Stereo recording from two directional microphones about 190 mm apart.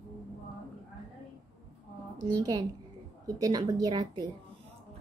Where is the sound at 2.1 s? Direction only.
20° right (ahead or behind).